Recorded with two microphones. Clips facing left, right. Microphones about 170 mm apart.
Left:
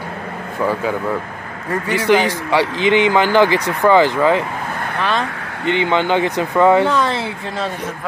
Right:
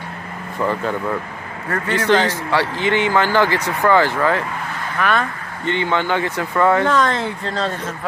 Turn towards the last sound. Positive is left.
turn(degrees=5)  # may be behind; listen again after turning